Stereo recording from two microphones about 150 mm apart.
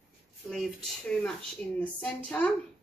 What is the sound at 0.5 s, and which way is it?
Speech, centre (ahead or behind).